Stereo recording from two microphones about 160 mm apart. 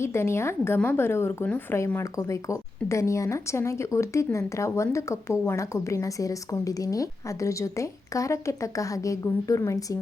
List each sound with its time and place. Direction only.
0.0 s a woman's voice: 15° left (ahead or behind)